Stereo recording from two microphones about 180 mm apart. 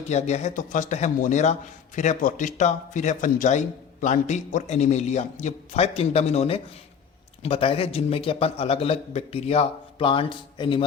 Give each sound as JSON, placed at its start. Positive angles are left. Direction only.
{"t": 0.1, "sound": "a man's voice", "side_deg": 40}